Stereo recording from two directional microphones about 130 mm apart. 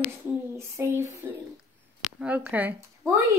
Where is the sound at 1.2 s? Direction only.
20° right (ahead or behind).